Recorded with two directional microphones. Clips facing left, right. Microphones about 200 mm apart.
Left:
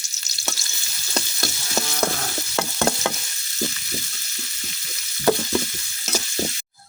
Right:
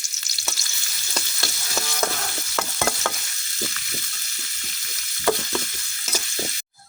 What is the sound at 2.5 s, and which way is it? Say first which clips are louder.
Stir: left 3 dB; 15° left (ahead or behind).